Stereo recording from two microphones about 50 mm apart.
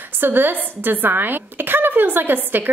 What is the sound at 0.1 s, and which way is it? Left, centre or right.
Speech, right.